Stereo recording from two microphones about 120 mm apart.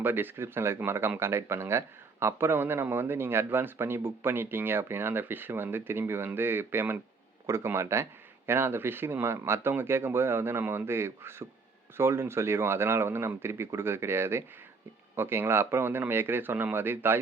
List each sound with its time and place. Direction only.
0.0 s speech: 15° right (ahead or behind)